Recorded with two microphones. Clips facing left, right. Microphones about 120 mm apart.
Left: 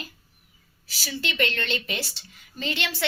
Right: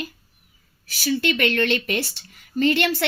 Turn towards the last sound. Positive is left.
turn(degrees=-55)  # may be behind; listen again after turning